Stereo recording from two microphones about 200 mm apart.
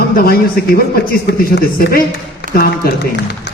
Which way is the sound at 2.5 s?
45° right (ahead or behind).